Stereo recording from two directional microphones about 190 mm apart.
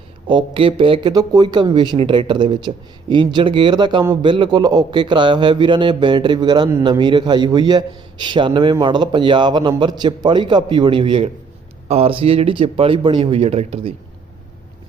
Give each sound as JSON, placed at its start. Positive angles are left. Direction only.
{"t": 0.3, "sound": "speech", "side_deg": -25}